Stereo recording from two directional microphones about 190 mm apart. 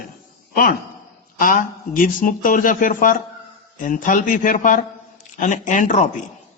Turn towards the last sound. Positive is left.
turn(degrees=40)  # may be behind; listen again after turning